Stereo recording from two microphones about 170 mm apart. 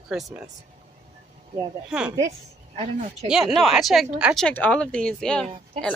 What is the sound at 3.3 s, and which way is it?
Speech, centre (ahead or behind).